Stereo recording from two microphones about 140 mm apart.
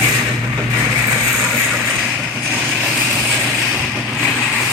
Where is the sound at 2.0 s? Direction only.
5° right (ahead or behind).